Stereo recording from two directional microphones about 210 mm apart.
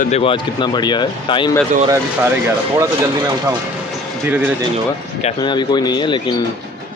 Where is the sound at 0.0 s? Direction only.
30° left (ahead or behind).